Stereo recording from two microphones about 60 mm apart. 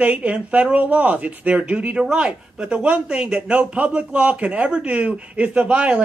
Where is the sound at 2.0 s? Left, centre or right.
Centre.